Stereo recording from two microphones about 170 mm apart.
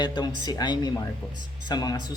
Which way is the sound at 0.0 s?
25° left (ahead or behind).